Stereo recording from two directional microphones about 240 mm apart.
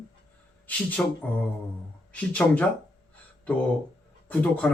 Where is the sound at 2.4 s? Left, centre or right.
Centre.